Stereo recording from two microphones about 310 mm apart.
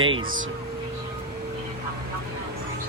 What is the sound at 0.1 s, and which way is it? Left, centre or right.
Speech, right.